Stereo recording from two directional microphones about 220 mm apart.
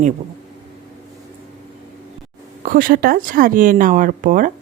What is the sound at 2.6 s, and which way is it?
Speech, 40° right (ahead or behind).